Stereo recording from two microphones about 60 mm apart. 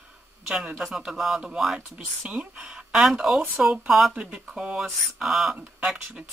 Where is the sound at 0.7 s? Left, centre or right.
Centre.